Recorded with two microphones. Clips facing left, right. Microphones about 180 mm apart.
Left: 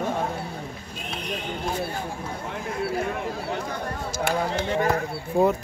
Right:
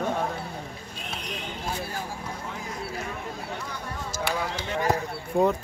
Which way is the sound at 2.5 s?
55° left (ahead or behind).